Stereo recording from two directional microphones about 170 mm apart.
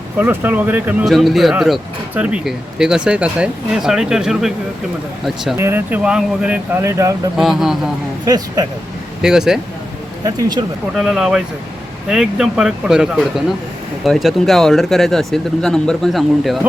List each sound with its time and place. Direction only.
0.2 s speech: 10° right (ahead or behind)
5.5 s speech: 15° right (ahead or behind)
6.9 s speech: 20° right (ahead or behind)
7.3 s speech: 5° right (ahead or behind)
8.2 s speech: 25° right (ahead or behind)
9.2 s speech: 5° right (ahead or behind)
10.2 s speech: 20° right (ahead or behind)
10.9 s speech: centre (ahead or behind)